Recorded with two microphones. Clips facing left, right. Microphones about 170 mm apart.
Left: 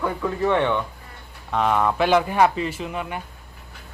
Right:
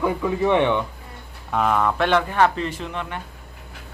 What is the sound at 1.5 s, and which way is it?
A man's voice, centre (ahead or behind).